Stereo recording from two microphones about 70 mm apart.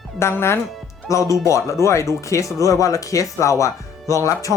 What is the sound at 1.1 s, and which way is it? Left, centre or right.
Speech, left.